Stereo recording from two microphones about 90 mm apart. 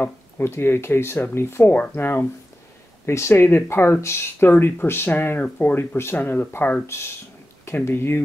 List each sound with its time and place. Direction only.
0.0 s speech: 25° left (ahead or behind)